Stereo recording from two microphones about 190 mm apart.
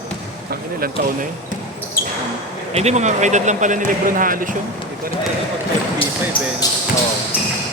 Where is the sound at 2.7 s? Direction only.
35° right (ahead or behind).